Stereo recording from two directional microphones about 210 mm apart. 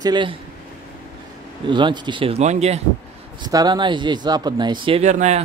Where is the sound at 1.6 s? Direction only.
20° right (ahead or behind).